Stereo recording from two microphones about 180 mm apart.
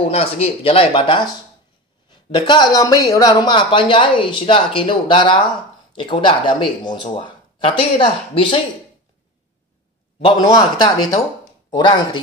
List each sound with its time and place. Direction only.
0.1 s speech: 35° left (ahead or behind)
2.3 s speech: 25° left (ahead or behind)
10.2 s speech: 20° left (ahead or behind)